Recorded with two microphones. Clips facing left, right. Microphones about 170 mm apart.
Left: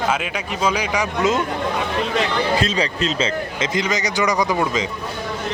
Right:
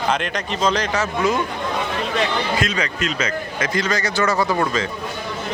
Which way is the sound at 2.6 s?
30° left (ahead or behind).